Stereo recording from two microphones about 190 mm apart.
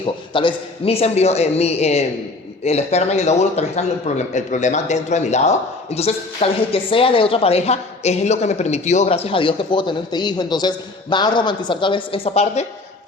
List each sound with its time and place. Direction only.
0.0 s a man's voice: 25° left (ahead or behind)